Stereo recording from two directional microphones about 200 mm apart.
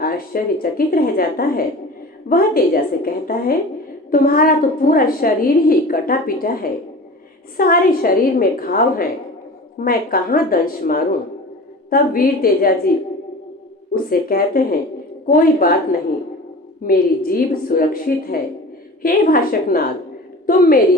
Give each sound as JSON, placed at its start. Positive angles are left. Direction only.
{"t": 0.0, "sound": "a woman's voice", "side_deg": 45}
{"t": 13.9, "sound": "a woman's voice", "side_deg": 45}